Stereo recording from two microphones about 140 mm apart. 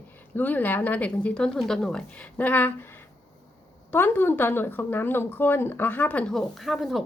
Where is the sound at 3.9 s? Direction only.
15° left (ahead or behind).